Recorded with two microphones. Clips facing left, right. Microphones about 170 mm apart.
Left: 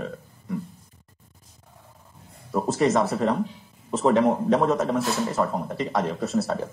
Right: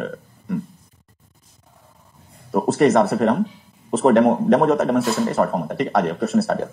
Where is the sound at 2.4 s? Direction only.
65° right (ahead or behind).